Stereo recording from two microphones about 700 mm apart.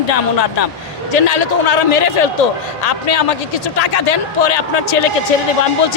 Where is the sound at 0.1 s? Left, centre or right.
Left.